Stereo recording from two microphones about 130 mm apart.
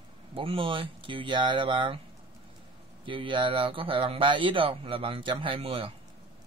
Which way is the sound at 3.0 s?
40° right (ahead or behind).